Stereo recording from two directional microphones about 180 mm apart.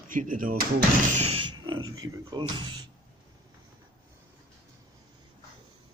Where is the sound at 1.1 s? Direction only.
30° right (ahead or behind).